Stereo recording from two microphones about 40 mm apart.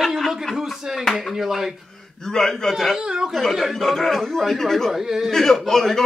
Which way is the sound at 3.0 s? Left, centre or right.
Centre.